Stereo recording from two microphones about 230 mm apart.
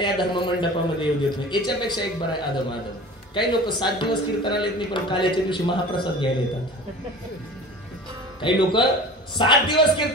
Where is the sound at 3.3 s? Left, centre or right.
Centre.